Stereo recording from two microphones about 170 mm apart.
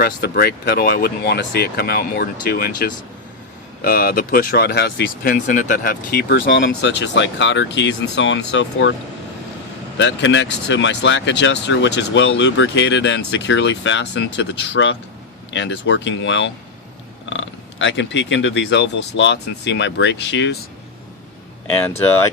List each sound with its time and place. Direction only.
0.0 s speech: 65° left (ahead or behind); by 9.0 s 90° left
10.0 s speech: 90° left